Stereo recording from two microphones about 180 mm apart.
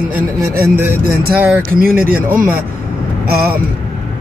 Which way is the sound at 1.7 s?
55° right (ahead or behind).